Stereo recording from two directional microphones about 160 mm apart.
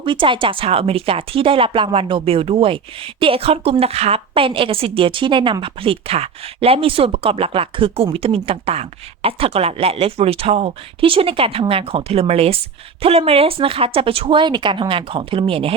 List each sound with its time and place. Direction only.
0.0 s speech: 30° right (ahead or behind)